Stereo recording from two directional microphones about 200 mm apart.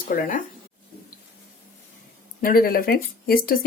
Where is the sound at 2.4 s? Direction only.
45° left (ahead or behind).